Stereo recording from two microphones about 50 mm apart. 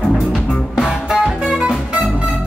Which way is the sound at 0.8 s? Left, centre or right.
Centre.